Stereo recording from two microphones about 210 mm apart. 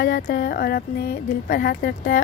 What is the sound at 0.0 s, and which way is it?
Speech, 50° left (ahead or behind).